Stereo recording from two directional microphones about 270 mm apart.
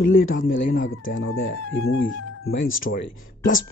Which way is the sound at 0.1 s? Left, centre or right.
Left.